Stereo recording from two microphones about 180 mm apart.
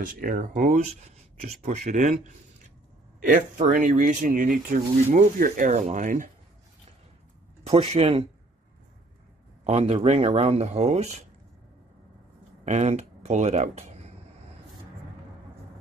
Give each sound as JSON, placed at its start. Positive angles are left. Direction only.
{"t": 0.0, "sound": "speech", "side_deg": -50}
{"t": 7.9, "sound": "speech", "side_deg": -35}
{"t": 9.7, "sound": "speech", "side_deg": -35}
{"t": 12.6, "sound": "speech", "side_deg": -40}